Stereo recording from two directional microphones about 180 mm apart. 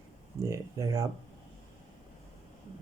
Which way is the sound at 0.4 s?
15° right (ahead or behind).